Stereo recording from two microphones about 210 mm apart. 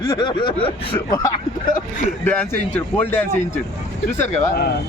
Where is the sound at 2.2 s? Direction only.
10° left (ahead or behind).